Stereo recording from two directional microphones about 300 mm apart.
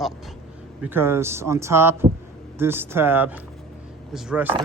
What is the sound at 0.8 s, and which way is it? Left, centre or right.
A man's voice, centre.